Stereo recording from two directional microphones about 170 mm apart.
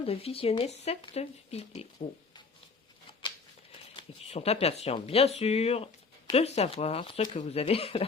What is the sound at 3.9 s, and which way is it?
Speech, 35° left (ahead or behind).